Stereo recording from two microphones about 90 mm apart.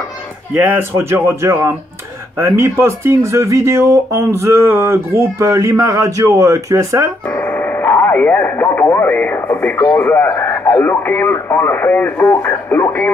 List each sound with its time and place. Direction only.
0.6 s speech: 20° right (ahead or behind)
7.5 s radio: 30° left (ahead or behind)
9.9 s speech: 20° left (ahead or behind)